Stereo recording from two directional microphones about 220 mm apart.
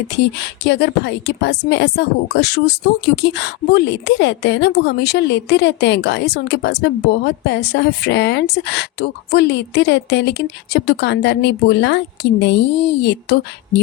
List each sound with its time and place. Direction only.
0.6 s speech: 50° left (ahead or behind)